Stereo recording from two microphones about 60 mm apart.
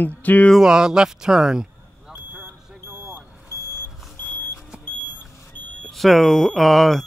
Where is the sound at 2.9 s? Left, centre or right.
Centre.